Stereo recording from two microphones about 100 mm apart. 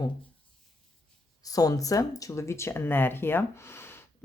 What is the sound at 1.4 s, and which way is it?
Speech, 35° left (ahead or behind).